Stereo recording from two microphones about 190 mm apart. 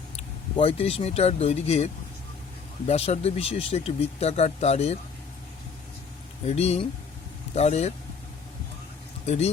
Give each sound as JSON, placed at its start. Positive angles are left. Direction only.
{"t": 0.5, "sound": "speech", "side_deg": 30}
{"t": 6.5, "sound": "speech", "side_deg": 35}
{"t": 9.2, "sound": "speech", "side_deg": 35}